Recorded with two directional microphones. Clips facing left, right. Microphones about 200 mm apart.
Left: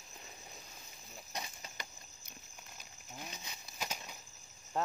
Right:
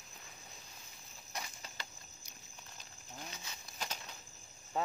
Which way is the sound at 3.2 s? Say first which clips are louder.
Left 1 dB; 10° left (ahead or behind).